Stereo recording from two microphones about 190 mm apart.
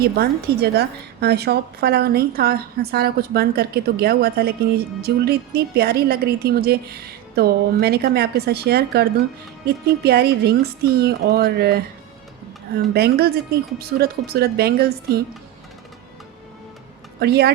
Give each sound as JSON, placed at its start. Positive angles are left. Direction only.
{"t": 0.0, "sound": "a woman's voice", "side_deg": -55}
{"t": 12.9, "sound": "a woman's voice", "side_deg": -55}
{"t": 17.2, "sound": "a woman's voice", "side_deg": -60}